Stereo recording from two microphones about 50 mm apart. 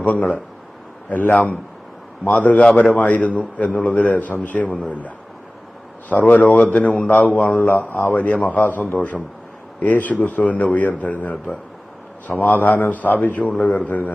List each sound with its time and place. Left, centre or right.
0.0 s speech: left
2.6 s a man's voice: left